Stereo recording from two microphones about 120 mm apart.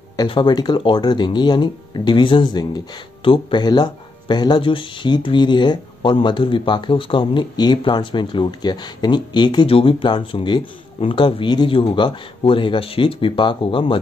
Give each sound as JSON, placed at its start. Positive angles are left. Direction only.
{"t": 0.3, "sound": "speech", "side_deg": 40}